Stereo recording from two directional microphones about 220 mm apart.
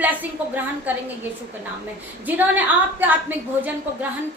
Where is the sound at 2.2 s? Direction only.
10° right (ahead or behind).